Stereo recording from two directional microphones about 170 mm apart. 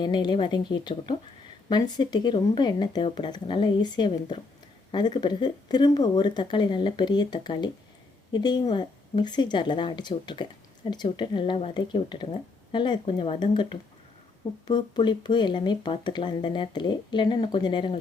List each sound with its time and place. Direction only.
0.0 s speech: 25° left (ahead or behind)